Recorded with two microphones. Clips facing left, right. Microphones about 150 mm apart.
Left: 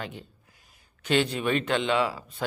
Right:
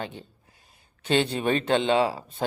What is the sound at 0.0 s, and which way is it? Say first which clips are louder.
Speech: right 2 dB; 30° right (ahead or behind).